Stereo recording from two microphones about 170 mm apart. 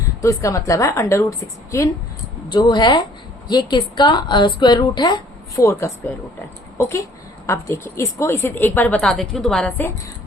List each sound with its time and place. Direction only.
0.2 s a woman's voice: 20° left (ahead or behind)